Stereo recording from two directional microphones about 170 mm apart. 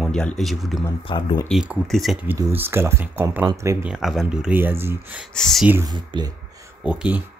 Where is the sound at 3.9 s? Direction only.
Centre (ahead or behind).